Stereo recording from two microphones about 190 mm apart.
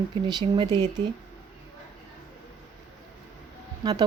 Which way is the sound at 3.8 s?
20° right (ahead or behind).